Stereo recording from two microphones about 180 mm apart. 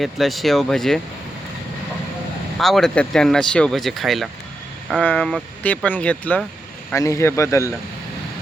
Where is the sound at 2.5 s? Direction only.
Centre (ahead or behind).